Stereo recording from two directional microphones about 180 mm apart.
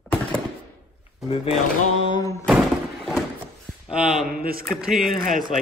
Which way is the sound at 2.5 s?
5° right (ahead or behind).